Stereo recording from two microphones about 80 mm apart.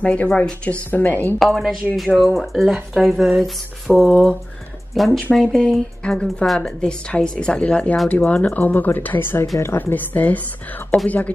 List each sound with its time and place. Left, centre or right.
0.0 s speech: centre
1.4 s speech: centre